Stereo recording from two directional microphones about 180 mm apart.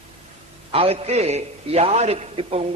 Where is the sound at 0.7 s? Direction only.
30° right (ahead or behind).